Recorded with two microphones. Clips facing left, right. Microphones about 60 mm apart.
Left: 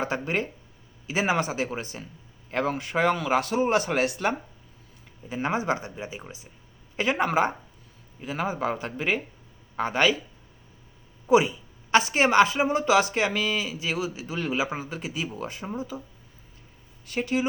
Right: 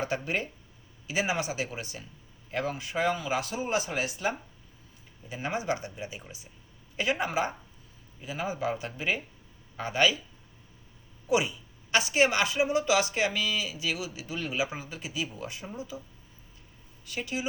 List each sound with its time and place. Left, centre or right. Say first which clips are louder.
0.0 s speech: left 3 dB; left
5.3 s speech: left 5 dB; left
6.9 s speech: left 5 dB; left
11.3 s speech: left 7 dB; left
17.1 s speech: left 7 dB; left